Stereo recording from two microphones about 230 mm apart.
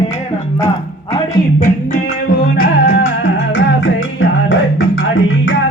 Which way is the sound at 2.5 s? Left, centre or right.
Left.